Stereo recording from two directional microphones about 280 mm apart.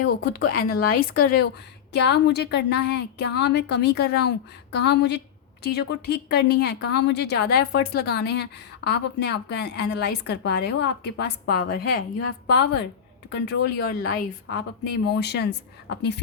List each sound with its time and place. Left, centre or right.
0.0 s speech: left
0.3 s speech: left
13.3 s speech: left